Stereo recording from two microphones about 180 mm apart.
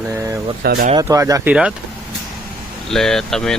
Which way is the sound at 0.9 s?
20° right (ahead or behind).